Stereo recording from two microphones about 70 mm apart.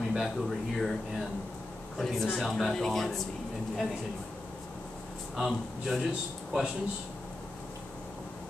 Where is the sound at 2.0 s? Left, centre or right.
Centre.